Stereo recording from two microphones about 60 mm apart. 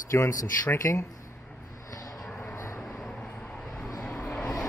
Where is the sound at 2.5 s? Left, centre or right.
Left.